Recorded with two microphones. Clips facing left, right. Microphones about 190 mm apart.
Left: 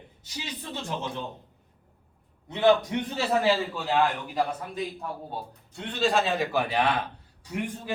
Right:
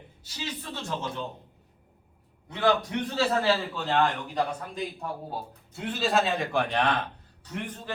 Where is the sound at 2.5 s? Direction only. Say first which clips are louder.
Left 4 dB; 20° left (ahead or behind).